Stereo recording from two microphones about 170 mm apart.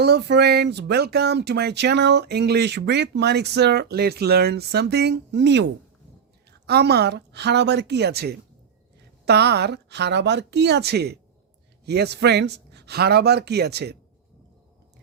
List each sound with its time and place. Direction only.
0.0 s speech: 75° right (ahead or behind); by 5.6 s 90° right
6.7 s a woman's voice: 70° right (ahead or behind)